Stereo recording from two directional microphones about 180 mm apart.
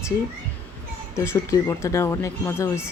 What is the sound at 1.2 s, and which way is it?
Speech, 15° left (ahead or behind).